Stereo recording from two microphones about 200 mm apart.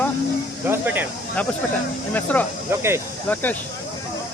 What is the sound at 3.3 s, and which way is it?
Speech, 10° left (ahead or behind).